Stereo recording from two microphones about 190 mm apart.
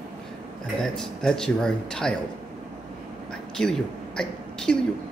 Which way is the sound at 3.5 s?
5° left (ahead or behind).